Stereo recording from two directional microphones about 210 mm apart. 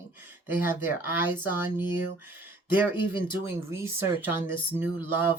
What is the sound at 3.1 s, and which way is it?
Speech, 20° left (ahead or behind).